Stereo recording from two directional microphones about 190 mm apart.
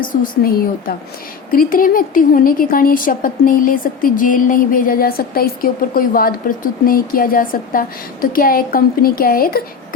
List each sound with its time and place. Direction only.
0.0 s a woman's voice: 45° left (ahead or behind)